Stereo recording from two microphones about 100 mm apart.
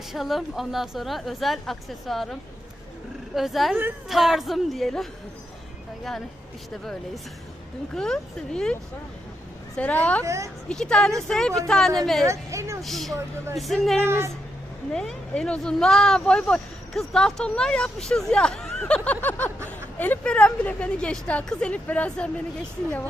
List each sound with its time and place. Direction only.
0.1 s a woman's voice: centre (ahead or behind)
7.9 s speech: 5° left (ahead or behind)
9.7 s speech: 15° left (ahead or behind)
10.2 s a woman's voice: 30° right (ahead or behind)
10.7 s a woman's voice: 5° left (ahead or behind)
12.2 s a woman's voice: 30° right (ahead or behind)
12.8 s a woman's voice: centre (ahead or behind)
14.0 s speech: 25° right (ahead or behind)
14.9 s speech: 10° left (ahead or behind)